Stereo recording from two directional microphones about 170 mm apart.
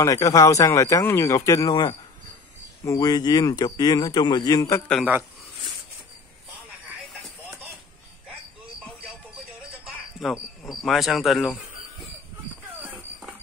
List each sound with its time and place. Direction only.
0.0 s speech: 20° left (ahead or behind)
9.6 s music: 5° right (ahead or behind)
10.8 s speech: centre (ahead or behind)
12.8 s a sound: 5° right (ahead or behind)